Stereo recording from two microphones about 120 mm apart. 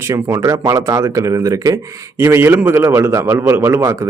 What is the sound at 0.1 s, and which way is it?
Speech, 25° right (ahead or behind).